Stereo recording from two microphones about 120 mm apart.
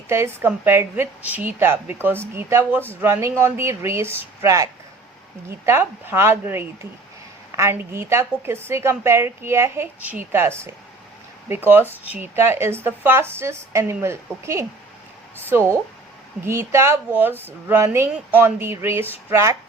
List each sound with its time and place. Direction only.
0.1 s speech: 20° right (ahead or behind)